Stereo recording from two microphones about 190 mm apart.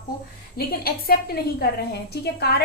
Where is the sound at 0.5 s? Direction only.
55° left (ahead or behind).